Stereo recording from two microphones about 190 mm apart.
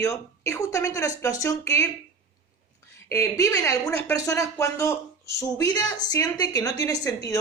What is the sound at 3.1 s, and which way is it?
A woman's voice, 15° left (ahead or behind).